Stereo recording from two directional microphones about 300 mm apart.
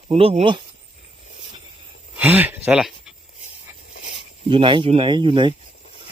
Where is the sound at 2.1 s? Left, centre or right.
Centre.